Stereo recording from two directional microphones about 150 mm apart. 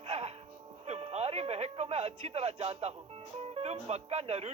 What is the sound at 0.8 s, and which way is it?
Speech, 45° right (ahead or behind).